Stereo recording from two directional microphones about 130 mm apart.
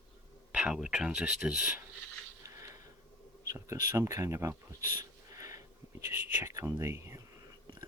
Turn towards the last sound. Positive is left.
turn(degrees=-20)  # may be behind; listen again after turning